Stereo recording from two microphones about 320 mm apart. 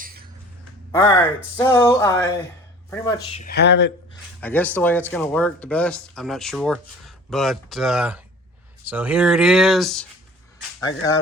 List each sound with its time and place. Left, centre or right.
0.0 s a sound: right
0.9 s speech: centre
3.4 s speech: left
4.4 s speech: centre